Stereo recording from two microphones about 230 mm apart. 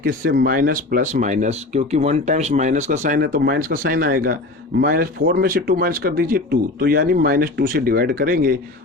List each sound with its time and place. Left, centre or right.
0.0 s speech: right